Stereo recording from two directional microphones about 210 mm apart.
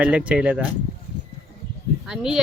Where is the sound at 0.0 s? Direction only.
5° right (ahead or behind).